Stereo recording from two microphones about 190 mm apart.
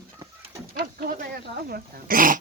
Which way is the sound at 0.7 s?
50° right (ahead or behind).